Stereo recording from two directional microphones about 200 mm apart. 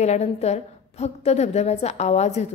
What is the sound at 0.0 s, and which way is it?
Speech, 35° left (ahead or behind).